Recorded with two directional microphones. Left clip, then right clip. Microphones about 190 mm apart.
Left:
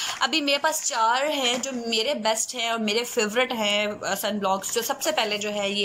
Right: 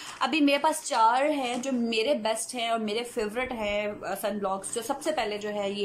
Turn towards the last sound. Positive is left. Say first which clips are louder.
# left 4 dB
turn(degrees=-20)  # may be behind; listen again after turning